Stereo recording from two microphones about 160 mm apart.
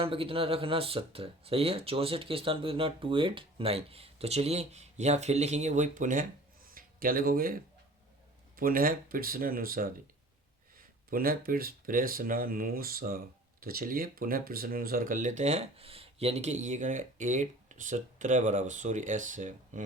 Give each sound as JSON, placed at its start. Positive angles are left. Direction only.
{"t": 0.0, "sound": "speech", "side_deg": -35}
{"t": 6.7, "sound": "a sound", "side_deg": -65}
{"t": 8.5, "sound": "speech", "side_deg": -65}